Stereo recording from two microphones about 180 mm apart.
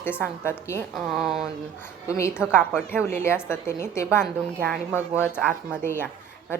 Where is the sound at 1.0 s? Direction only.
Centre (ahead or behind).